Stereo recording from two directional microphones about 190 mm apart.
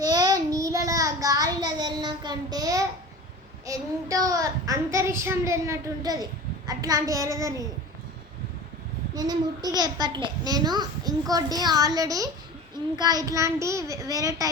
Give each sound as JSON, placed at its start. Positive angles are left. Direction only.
{"t": 0.0, "sound": "child singing", "side_deg": -20}
{"t": 9.1, "sound": "a child's voice", "side_deg": -20}